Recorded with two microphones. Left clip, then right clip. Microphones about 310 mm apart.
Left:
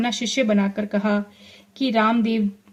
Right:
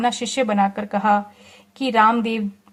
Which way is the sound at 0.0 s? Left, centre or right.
Centre.